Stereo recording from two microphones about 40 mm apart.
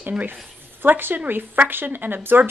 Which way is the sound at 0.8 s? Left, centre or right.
Right.